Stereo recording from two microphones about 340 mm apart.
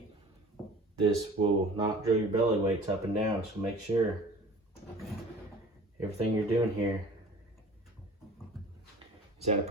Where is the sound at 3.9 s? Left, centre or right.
Centre.